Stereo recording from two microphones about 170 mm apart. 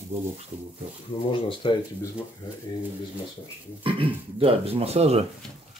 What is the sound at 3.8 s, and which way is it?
Speech, 30° right (ahead or behind).